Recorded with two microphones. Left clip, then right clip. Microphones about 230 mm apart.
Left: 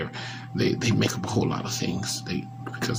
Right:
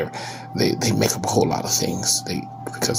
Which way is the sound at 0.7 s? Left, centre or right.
Centre.